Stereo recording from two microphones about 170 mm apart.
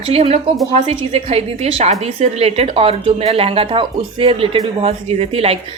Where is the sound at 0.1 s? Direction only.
35° right (ahead or behind).